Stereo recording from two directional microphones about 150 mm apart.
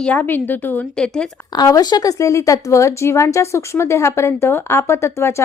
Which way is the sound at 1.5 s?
25° left (ahead or behind).